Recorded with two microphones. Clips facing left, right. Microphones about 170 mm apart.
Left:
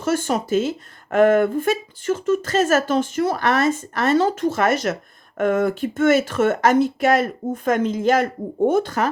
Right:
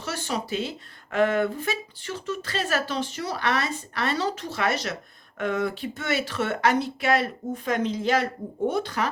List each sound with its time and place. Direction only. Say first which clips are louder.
0.0 s speech: left 9 dB; 50° left (ahead or behind)